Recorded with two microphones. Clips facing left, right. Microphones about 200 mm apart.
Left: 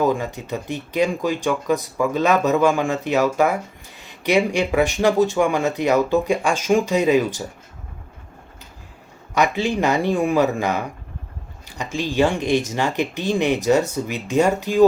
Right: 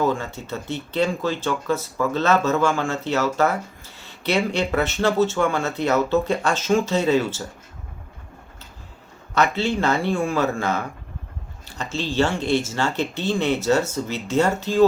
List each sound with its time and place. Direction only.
0.0 s speech: 15° left (ahead or behind)
9.3 s speech: 15° left (ahead or behind)